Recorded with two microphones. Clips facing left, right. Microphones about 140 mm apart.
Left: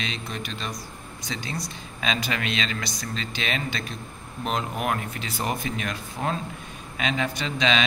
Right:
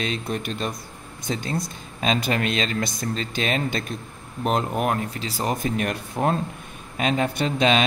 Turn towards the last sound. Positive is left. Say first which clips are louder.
# right 4 dB
turn(degrees=-50)  # may be behind; listen again after turning